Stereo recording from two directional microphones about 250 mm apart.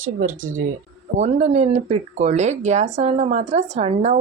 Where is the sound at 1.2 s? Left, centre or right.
Right.